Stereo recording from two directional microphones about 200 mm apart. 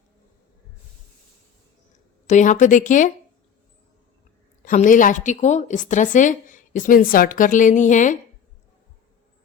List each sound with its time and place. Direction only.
2.2 s a woman's voice: 40° left (ahead or behind)
4.6 s a woman's voice: 40° left (ahead or behind)